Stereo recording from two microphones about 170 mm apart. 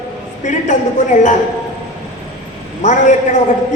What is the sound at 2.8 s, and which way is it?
Speech, 45° left (ahead or behind).